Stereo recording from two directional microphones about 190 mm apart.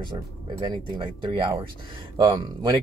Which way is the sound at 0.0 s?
25° right (ahead or behind).